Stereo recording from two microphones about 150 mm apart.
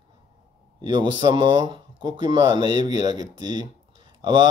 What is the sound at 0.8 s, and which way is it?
Speech, 30° right (ahead or behind).